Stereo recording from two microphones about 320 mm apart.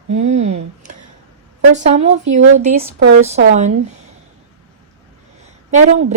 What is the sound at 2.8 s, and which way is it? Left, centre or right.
Speech, right.